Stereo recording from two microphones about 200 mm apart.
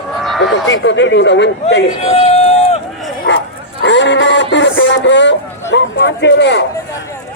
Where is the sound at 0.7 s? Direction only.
65° left (ahead or behind).